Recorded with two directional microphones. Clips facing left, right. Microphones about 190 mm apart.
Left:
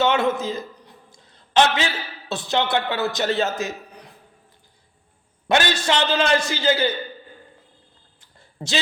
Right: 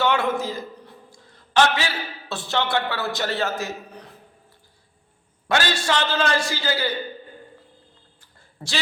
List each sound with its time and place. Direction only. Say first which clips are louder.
0.0 s a sound: left 2 dB; 20° left (ahead or behind)
2.3 s a man's voice: left 2 dB; 15° left (ahead or behind)
5.5 s a man's voice: left 2 dB; 20° left (ahead or behind)